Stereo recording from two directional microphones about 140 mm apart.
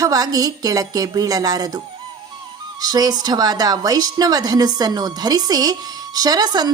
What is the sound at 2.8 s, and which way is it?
A woman's voice, 25° right (ahead or behind).